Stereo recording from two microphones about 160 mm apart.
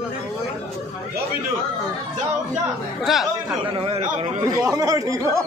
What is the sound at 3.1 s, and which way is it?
Speech, centre (ahead or behind).